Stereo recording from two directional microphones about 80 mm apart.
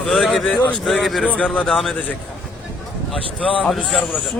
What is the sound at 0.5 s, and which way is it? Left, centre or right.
Speech, left.